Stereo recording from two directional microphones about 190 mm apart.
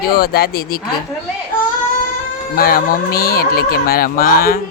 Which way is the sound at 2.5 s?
50° left (ahead or behind).